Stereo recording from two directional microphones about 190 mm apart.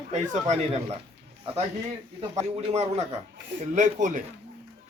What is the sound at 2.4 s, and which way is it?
Speech, 35° right (ahead or behind).